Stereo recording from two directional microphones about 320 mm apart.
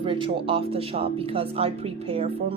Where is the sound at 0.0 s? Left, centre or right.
Centre.